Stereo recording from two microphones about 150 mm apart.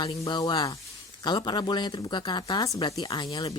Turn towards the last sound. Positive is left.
turn(degrees=25)  # may be behind; listen again after turning